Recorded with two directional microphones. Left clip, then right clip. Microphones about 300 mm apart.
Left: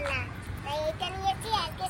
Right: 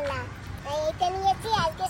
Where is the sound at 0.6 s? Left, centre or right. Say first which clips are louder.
Right 5 dB; centre.